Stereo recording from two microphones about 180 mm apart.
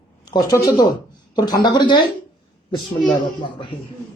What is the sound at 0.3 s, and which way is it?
A man's voice, 20° left (ahead or behind).